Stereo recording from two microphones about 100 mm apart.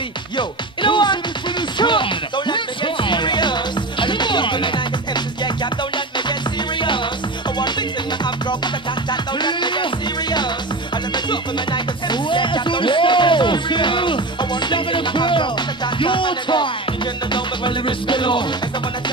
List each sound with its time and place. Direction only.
0.4 s music: 50° left (ahead or behind)
9.1 s music: 50° left (ahead or behind)
11.2 s music: 50° left (ahead or behind)